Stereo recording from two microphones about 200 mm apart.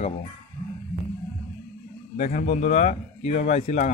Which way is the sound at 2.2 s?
40° left (ahead or behind).